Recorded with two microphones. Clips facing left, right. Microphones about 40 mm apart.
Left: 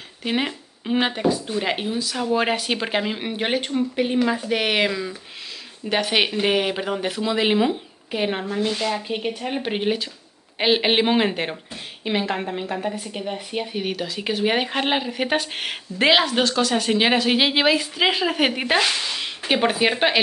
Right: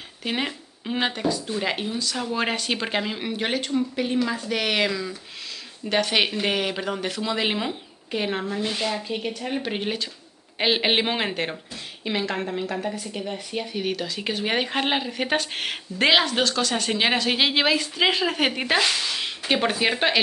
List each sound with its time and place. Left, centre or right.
0.2 s speech: centre
8.6 s speech: centre
8.9 s speech: centre